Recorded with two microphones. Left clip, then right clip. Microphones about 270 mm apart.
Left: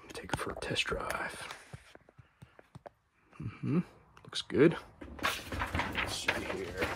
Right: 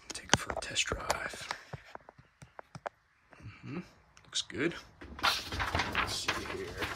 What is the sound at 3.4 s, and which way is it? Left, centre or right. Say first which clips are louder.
Dog: left 9 dB; centre.